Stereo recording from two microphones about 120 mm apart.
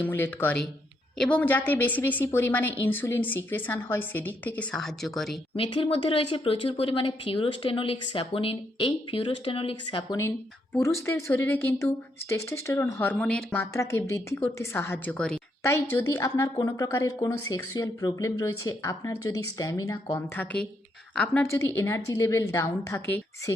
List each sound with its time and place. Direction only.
0.0 s a woman's voice: 15° left (ahead or behind)
5.5 s speech: 50° left (ahead or behind)
10.2 s a woman's voice: 20° left (ahead or behind)
15.6 s a woman's voice: 25° left (ahead or behind)
20.3 s a woman's voice: 15° left (ahead or behind)